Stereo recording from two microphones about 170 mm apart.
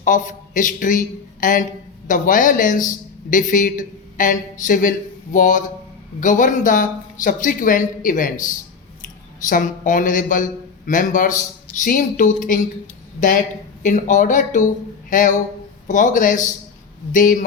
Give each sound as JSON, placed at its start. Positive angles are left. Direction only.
{"t": 0.0, "sound": "a man's voice", "side_deg": 50}